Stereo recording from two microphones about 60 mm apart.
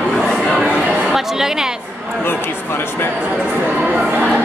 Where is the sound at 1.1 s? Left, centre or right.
Centre.